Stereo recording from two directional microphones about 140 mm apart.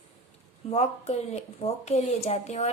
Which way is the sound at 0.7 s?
50° left (ahead or behind).